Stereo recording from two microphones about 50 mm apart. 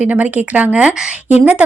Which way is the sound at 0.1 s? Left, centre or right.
Right.